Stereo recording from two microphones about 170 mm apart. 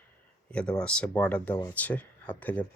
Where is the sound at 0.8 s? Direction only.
5° left (ahead or behind).